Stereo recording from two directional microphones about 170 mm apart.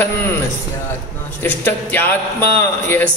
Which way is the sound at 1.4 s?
10° left (ahead or behind).